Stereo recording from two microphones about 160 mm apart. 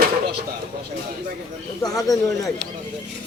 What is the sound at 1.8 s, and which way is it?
Speech, 20° left (ahead or behind).